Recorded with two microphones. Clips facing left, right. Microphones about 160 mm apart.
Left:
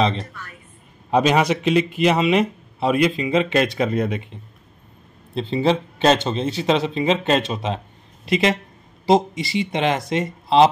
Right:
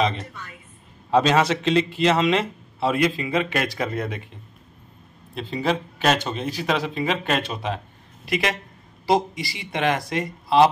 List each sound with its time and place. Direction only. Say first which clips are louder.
1.1 s a man's voice: left 1 dB; 15° left (ahead or behind)
5.3 s a man's voice: left 5 dB; 25° left (ahead or behind)